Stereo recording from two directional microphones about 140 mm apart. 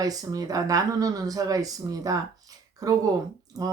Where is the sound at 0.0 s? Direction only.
25° right (ahead or behind).